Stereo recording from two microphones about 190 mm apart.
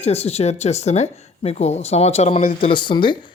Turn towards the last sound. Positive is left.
turn(degrees=25)  # may be behind; listen again after turning